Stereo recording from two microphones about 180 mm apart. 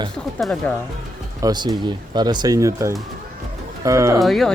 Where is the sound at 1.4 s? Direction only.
20° right (ahead or behind).